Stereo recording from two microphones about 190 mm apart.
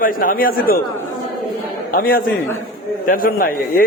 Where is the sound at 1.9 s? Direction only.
50° left (ahead or behind).